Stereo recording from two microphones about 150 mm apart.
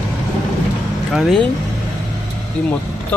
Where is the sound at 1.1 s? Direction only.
Centre (ahead or behind).